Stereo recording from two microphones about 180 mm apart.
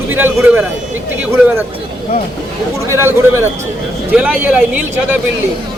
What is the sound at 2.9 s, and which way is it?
Speech, 15° right (ahead or behind).